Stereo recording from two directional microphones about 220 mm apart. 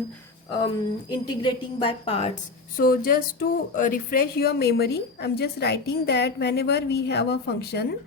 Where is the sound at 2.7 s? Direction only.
40° left (ahead or behind).